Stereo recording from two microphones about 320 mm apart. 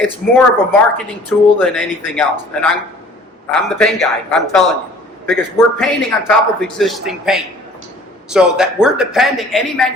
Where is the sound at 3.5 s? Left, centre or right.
Centre.